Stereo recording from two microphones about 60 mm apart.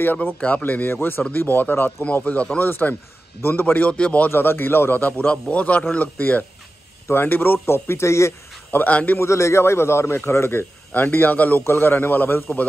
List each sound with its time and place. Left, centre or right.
0.0 s a man's voice: left
2.6 s a man's voice: left
4.3 s a man's voice: left
8.7 s a man's voice: left
9.2 s a man's voice: left
10.9 s a man's voice: left
11.6 s a man's voice: left